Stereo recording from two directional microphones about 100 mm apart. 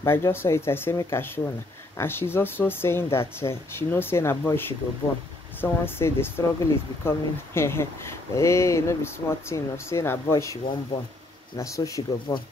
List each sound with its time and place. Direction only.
0.0 s speech: 25° left (ahead or behind)